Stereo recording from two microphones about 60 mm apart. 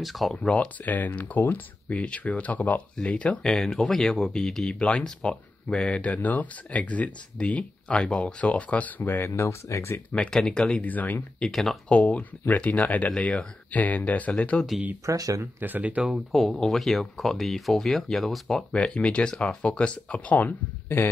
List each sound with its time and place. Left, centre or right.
0.0 s speech: centre
0.4 s speech: centre
0.8 s speech: left; by 4.7 s centre
4.7 s speech: centre
9.3 s speech: left
10.3 s speech: centre
10.8 s speech: left
11.3 s speech: centre
11.9 s speech: centre
15.0 s speech: right
15.6 s speech: right
16.3 s speech: centre
18.7 s speech: centre; by 21.1 s left